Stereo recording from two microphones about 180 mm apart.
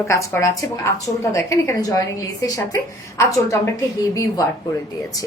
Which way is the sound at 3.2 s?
15° left (ahead or behind).